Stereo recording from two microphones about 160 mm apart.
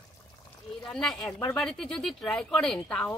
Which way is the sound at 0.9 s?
5° left (ahead or behind).